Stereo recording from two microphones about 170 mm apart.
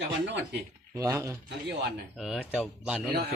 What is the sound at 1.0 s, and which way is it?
Speech, 20° right (ahead or behind).